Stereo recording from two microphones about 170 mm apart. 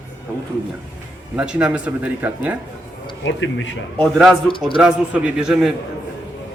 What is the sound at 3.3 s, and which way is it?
Speech, 90° left.